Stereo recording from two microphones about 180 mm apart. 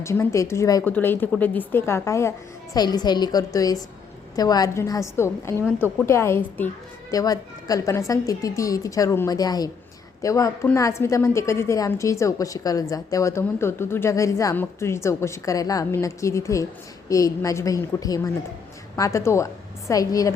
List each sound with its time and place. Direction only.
0.0 s a woman's voice: 15° left (ahead or behind)